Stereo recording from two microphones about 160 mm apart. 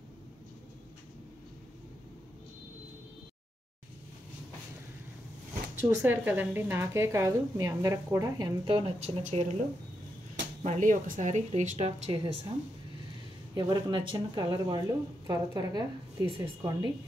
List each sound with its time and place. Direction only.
5.8 s speech: 15° right (ahead or behind)
8.6 s speech: 35° right (ahead or behind)
10.6 s speech: 50° right (ahead or behind)
13.6 s speech: 25° right (ahead or behind)